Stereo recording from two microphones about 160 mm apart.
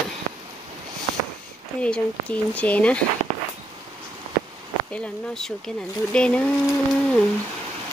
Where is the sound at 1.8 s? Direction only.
5° left (ahead or behind).